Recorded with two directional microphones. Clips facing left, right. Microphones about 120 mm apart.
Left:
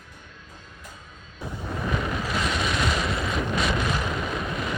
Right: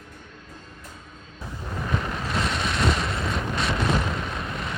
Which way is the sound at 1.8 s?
5° left (ahead or behind).